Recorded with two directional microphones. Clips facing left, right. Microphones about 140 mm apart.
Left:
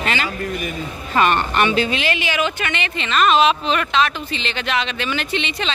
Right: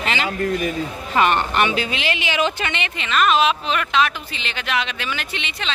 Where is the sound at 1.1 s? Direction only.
15° right (ahead or behind).